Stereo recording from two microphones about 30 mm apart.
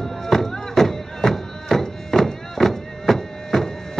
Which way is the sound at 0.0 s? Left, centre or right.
Centre.